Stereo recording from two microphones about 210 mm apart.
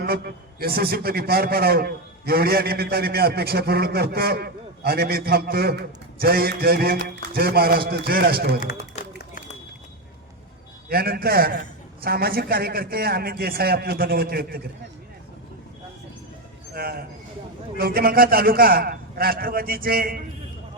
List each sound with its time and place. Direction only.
0.0 s a man's voice: 45° right (ahead or behind)
9.0 s run: 30° left (ahead or behind)
10.8 s a man's voice: 45° right (ahead or behind)
16.7 s a man's voice: 45° right (ahead or behind)